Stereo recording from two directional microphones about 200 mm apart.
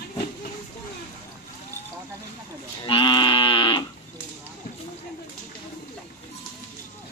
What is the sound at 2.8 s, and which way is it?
Livestock, 25° left (ahead or behind).